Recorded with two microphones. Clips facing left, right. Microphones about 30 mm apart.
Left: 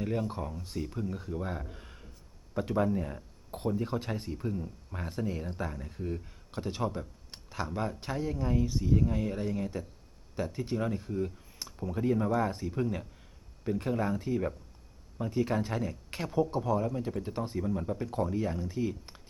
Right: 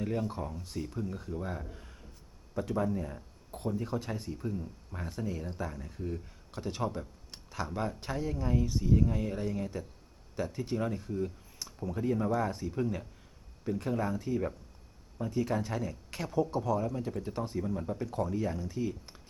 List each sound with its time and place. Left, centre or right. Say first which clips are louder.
0.0 s speech: left 1 dB; centre
3.5 s speech: left 3 dB; left
3.8 s speech: left 1 dB; left
4.3 s speech: left 2 dB; centre
7.3 s a sound: left 1 dB; centre
7.7 s speech: left 1 dB; centre